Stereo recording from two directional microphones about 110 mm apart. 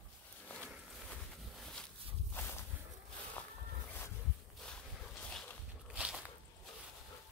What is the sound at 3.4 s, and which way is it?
Boat, 15° left (ahead or behind).